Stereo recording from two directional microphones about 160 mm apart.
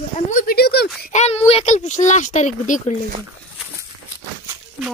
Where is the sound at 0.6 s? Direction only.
85° left.